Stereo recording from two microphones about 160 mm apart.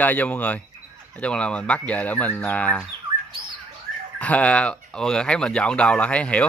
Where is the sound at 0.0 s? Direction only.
10° left (ahead or behind).